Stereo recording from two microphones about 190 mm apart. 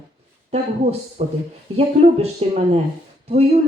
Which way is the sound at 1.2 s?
35° right (ahead or behind).